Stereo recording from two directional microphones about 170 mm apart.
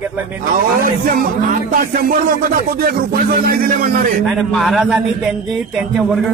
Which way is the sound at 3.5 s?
60° right (ahead or behind).